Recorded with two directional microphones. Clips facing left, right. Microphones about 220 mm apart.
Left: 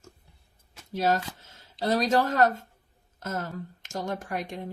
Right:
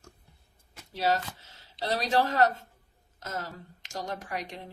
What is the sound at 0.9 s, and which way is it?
Speech, 50° left (ahead or behind).